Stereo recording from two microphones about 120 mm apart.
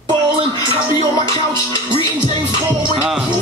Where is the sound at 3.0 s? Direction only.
5° right (ahead or behind).